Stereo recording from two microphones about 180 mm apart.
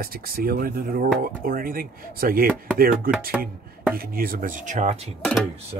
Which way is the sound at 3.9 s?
55° right (ahead or behind).